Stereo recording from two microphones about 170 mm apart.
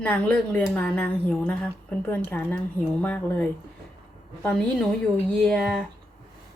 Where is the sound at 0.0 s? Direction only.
10° left (ahead or behind).